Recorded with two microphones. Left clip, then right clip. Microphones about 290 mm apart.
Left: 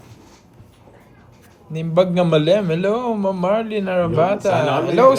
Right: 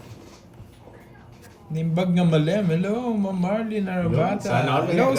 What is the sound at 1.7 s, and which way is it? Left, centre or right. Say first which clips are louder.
A man's voice: left 9 dB; centre.